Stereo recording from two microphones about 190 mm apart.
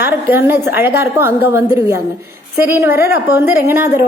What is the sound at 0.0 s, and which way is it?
A woman's voice, 10° right (ahead or behind).